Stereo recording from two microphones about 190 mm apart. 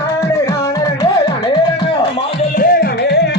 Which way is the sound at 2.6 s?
50° left (ahead or behind).